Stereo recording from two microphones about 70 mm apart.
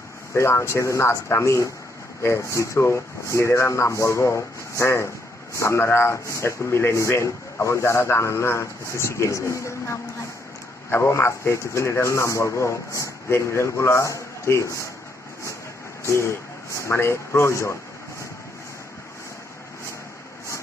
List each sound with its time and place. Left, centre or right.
0.3 s speech: left
16.1 s speech: left